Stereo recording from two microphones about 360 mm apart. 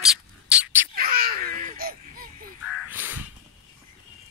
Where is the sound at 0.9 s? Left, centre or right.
Right.